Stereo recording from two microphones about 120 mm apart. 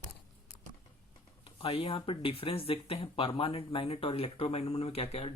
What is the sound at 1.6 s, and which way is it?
Speech, 50° left (ahead or behind).